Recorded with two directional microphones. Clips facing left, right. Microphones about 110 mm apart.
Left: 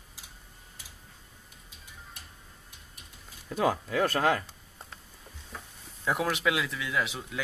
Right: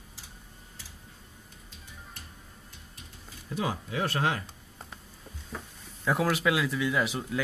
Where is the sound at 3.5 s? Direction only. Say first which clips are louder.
Left 5 dB; 50° left (ahead or behind).